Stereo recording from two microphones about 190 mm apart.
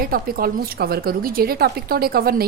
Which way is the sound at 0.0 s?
50° right (ahead or behind).